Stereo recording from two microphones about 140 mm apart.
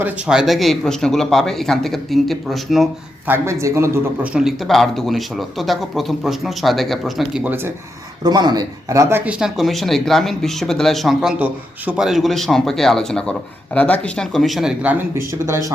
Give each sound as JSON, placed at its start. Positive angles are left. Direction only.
{"t": 0.0, "sound": "a man's voice", "side_deg": -5}
{"t": 3.2, "sound": "speech", "side_deg": -15}
{"t": 4.4, "sound": "a man's voice", "side_deg": 0}
{"t": 7.4, "sound": "speech", "side_deg": -15}
{"t": 8.2, "sound": "speech", "side_deg": -30}
{"t": 9.4, "sound": "a man's voice", "side_deg": 0}